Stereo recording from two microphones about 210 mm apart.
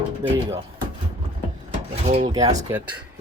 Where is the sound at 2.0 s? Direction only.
30° right (ahead or behind).